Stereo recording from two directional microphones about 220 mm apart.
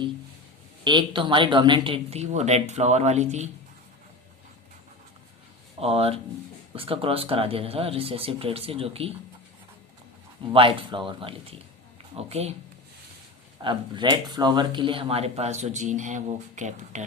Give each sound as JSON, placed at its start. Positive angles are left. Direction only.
{"t": 0.9, "sound": "speech", "side_deg": -20}
{"t": 5.8, "sound": "speech", "side_deg": -25}
{"t": 10.5, "sound": "speech", "side_deg": -25}
{"t": 13.6, "sound": "speech", "side_deg": -20}